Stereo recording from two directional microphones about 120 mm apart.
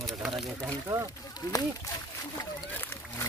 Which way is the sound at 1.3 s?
30° left (ahead or behind).